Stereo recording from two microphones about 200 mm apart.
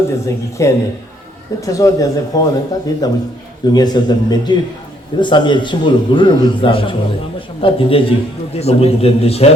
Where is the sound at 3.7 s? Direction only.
20° left (ahead or behind).